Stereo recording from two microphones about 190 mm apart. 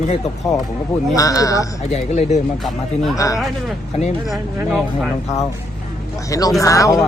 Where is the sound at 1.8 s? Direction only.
35° left (ahead or behind).